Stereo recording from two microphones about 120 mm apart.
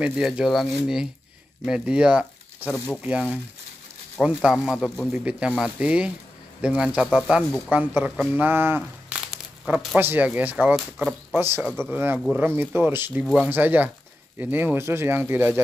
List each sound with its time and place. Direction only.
0.0 s speech: 5° right (ahead or behind)